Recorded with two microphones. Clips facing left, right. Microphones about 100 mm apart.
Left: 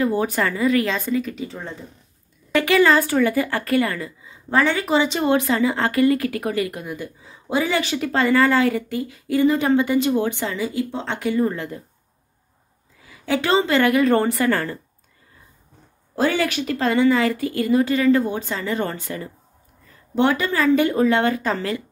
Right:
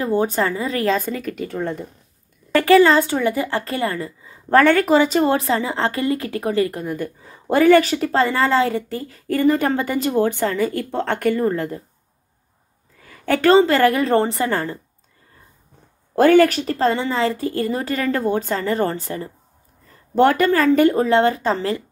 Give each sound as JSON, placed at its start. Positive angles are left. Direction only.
{"t": 0.0, "sound": "speech", "side_deg": -30}
{"t": 2.5, "sound": "speech", "side_deg": -35}
{"t": 4.5, "sound": "speech", "side_deg": -55}
{"t": 7.8, "sound": "speech", "side_deg": -40}
{"t": 9.3, "sound": "speech", "side_deg": -45}
{"t": 11.4, "sound": "speech", "side_deg": -40}
{"t": 13.0, "sound": "speech", "side_deg": -55}
{"t": 16.2, "sound": "speech", "side_deg": -50}
{"t": 20.2, "sound": "speech", "side_deg": -45}